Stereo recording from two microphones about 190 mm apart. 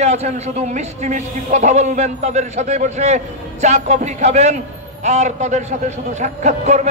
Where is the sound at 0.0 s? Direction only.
35° right (ahead or behind).